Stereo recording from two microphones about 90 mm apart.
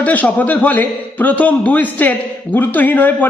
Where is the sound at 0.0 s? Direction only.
15° left (ahead or behind).